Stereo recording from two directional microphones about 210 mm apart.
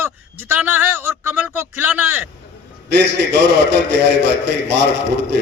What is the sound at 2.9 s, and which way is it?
A man's voice, 55° right (ahead or behind).